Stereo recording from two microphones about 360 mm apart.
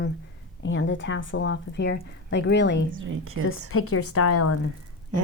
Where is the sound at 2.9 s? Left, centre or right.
Right.